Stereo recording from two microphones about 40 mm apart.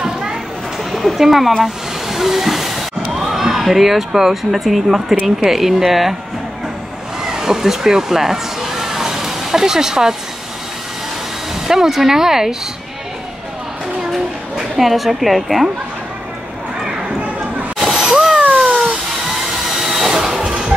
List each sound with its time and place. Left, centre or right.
0.0 s children playing: centre
0.9 s speech: centre
1.6 s hiss: centre
5.2 s a woman's voice: centre
7.2 s a sound: centre
11.6 s speech: centre
14.1 s a woman's voice: centre
17.8 s a sound: centre
18.3 s cat: right
19.2 s a sound: centre